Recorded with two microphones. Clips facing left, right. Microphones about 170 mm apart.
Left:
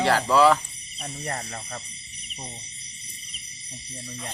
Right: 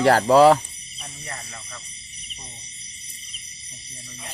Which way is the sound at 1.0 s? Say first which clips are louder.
Left 6 dB; 45° left (ahead or behind).